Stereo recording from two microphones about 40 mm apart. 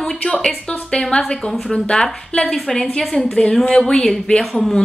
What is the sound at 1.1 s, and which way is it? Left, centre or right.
A woman's voice, left.